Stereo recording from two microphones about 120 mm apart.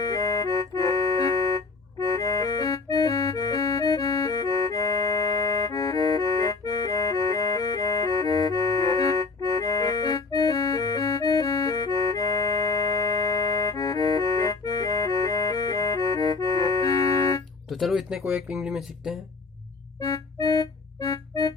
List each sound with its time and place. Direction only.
0.0 s music: 30° left (ahead or behind)
9.4 s accordion: 30° left (ahead or behind)
17.7 s speech: centre (ahead or behind)
20.0 s music: 30° left (ahead or behind)